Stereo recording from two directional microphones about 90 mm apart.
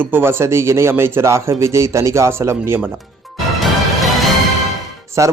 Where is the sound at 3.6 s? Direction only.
Centre (ahead or behind).